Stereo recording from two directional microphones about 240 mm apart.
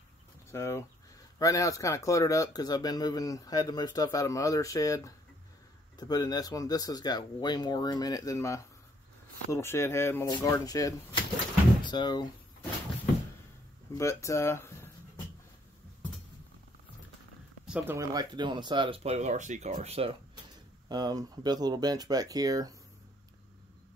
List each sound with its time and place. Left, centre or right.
0.5 s speech: centre
13.9 s speech: centre
17.6 s speech: centre